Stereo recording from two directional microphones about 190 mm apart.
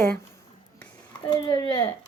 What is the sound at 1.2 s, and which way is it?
Speech, 25° left (ahead or behind).